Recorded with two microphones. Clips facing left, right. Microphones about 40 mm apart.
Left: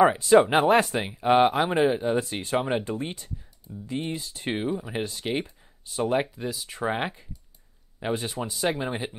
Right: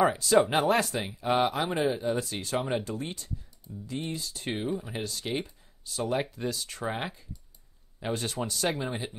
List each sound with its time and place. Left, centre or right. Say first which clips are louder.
0.1 s speech: left 5 dB; left
4.6 s speech: left 3 dB; centre
4.9 s speech: left 4 dB; left
6.2 s speech: even; centre